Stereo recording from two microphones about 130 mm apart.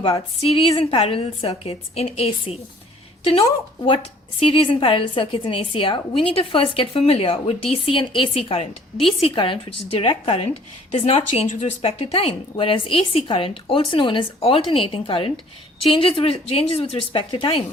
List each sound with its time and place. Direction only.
0.8 s a woman's voice: 45° left (ahead or behind)
3.8 s a woman's voice: 50° left (ahead or behind)